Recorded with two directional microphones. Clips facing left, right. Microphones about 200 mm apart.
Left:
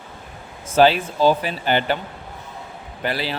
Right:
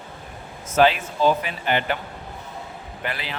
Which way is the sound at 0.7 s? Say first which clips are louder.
Left 3 dB; 30° left (ahead or behind).